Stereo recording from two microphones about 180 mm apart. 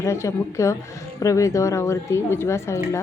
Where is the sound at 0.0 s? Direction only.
15° left (ahead or behind).